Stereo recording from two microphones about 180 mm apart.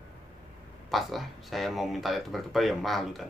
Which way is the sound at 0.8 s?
Centre (ahead or behind).